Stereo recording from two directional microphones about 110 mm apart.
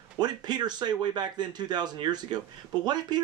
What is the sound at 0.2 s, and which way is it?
Speech, 40° right (ahead or behind).